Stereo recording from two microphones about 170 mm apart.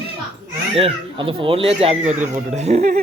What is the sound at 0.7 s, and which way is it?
A man's voice, 35° right (ahead or behind).